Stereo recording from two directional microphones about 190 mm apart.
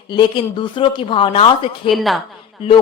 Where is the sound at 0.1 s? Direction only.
25° left (ahead or behind).